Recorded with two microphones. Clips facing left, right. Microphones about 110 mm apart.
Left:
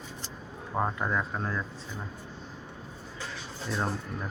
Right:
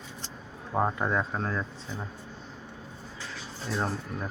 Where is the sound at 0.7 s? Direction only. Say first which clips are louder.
Right 3 dB; 10° right (ahead or behind).